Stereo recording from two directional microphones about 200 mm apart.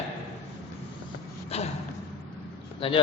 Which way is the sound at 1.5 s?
30° left (ahead or behind).